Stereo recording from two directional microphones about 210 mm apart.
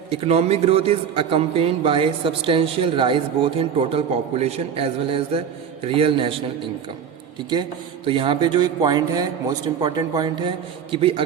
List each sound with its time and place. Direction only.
0.1 s a man's voice: 30° right (ahead or behind)
8.0 s a man's voice: 25° right (ahead or behind)